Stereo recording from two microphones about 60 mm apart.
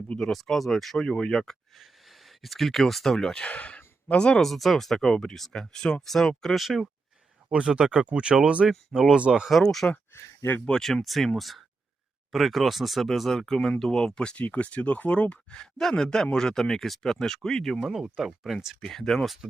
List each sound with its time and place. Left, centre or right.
0.2 s speech: centre
1.0 s speech: centre
3.4 s speech: left
4.4 s speech: centre
7.5 s speech: centre
9.5 s speech: centre; by 15.6 s left
15.6 s speech: centre
17.8 s speech: centre
18.8 s speech: centre